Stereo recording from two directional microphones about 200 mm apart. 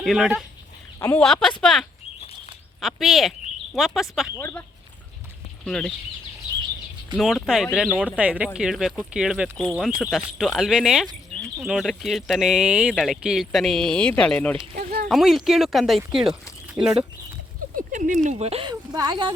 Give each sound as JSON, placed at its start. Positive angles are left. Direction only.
{"t": 0.0, "sound": "speech", "side_deg": 0}
{"t": 0.9, "sound": "speech", "side_deg": 15}
{"t": 1.2, "sound": "speech", "side_deg": 0}
{"t": 4.4, "sound": "speech", "side_deg": 10}
{"t": 5.6, "sound": "speech", "side_deg": 5}
{"t": 7.2, "sound": "speech", "side_deg": 0}
{"t": 14.8, "sound": "speech", "side_deg": -50}
{"t": 15.1, "sound": "speech", "side_deg": 0}
{"t": 17.7, "sound": "speech", "side_deg": -40}